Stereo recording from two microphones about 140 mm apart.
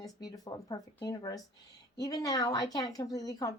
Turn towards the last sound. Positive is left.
turn(degrees=25)  # may be behind; listen again after turning